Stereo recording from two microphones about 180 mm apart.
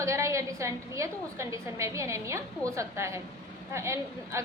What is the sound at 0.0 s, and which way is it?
A woman's voice, 15° right (ahead or behind).